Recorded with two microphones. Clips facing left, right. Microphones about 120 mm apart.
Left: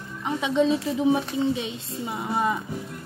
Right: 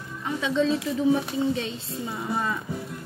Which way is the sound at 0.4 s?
15° left (ahead or behind).